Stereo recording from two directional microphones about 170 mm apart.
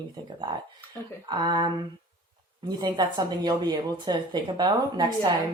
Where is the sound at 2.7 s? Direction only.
25° right (ahead or behind).